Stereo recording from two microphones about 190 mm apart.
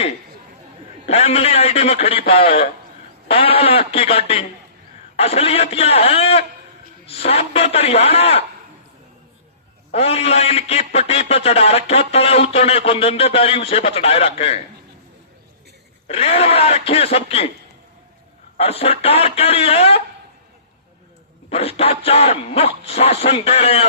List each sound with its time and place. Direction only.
1.0 s a man's voice: 35° left (ahead or behind)
9.9 s a man's voice: 35° left (ahead or behind)
16.0 s a man's voice: 30° left (ahead or behind)
18.5 s a man's voice: 30° left (ahead or behind)
21.5 s a man's voice: 30° left (ahead or behind)